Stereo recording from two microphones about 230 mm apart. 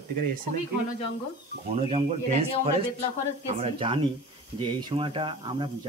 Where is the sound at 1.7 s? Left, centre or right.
Right.